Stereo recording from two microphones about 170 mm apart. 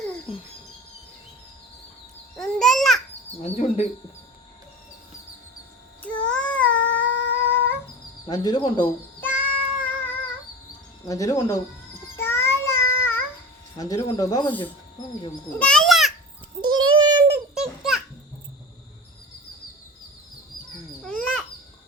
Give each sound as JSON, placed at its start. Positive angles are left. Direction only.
{"t": 2.3, "sound": "babbling", "side_deg": 0}
{"t": 3.4, "sound": "speech", "side_deg": 40}
{"t": 6.0, "sound": "child singing", "side_deg": 5}
{"t": 8.3, "sound": "speech", "side_deg": 25}
{"t": 9.2, "sound": "child singing", "side_deg": 10}
{"t": 11.0, "sound": "speech", "side_deg": 20}
{"t": 12.1, "sound": "child singing", "side_deg": 15}
{"t": 13.7, "sound": "speech", "side_deg": 20}
{"t": 15.5, "sound": "a sound", "side_deg": 5}
{"t": 16.6, "sound": "child singing", "side_deg": -25}
{"t": 17.6, "sound": "a sound", "side_deg": 0}
{"t": 21.0, "sound": "a sound", "side_deg": 5}